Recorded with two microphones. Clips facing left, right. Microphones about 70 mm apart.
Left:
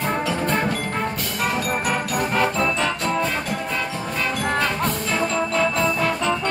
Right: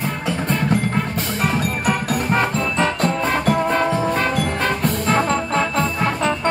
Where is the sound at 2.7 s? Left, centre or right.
Right.